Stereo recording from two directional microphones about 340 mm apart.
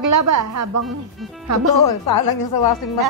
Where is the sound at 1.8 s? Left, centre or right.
Left.